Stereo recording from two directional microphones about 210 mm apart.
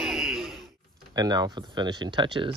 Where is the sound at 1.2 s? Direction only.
20° right (ahead or behind).